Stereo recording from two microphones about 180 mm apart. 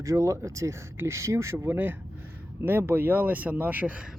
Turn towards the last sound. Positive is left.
turn(degrees=-10)  # may be behind; listen again after turning